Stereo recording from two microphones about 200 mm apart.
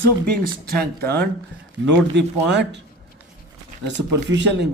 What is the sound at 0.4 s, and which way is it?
Speech, 50° right (ahead or behind).